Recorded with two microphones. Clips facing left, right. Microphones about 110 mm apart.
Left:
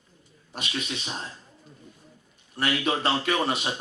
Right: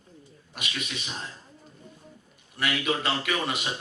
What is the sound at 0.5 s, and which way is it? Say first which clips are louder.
Speech: left 3 dB; 30° left (ahead or behind).